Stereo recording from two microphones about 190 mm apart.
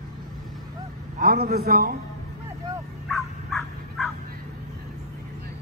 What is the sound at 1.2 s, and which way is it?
Speech, 50° right (ahead or behind).